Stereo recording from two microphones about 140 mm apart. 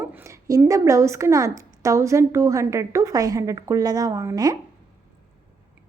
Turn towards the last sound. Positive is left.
turn(degrees=-25)  # may be behind; listen again after turning